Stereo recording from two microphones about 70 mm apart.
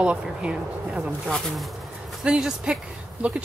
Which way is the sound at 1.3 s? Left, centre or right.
Centre.